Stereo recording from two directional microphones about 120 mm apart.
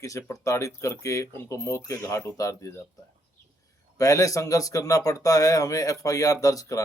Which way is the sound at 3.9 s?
30° left (ahead or behind).